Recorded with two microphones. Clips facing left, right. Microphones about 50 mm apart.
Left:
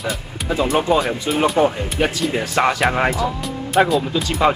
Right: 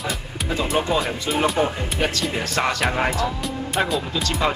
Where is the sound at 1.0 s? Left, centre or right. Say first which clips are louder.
Left 3 dB; centre.